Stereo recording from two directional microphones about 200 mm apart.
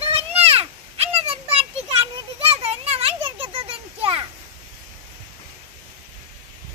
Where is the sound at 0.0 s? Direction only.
30° right (ahead or behind).